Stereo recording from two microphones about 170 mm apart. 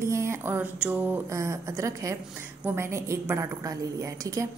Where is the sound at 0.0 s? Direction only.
15° right (ahead or behind).